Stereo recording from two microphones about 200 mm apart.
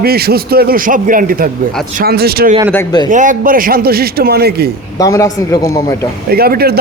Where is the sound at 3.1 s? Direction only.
40° right (ahead or behind).